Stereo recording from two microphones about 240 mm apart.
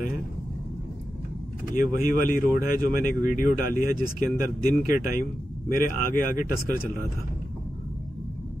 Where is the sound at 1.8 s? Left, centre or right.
Left.